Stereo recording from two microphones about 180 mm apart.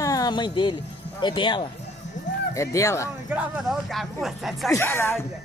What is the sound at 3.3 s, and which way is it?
Speech, 5° right (ahead or behind).